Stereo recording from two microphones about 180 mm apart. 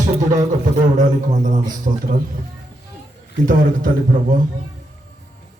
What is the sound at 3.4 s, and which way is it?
Speech, 45° right (ahead or behind).